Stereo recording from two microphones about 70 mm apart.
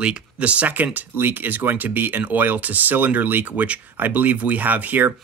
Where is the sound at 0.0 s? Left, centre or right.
Centre.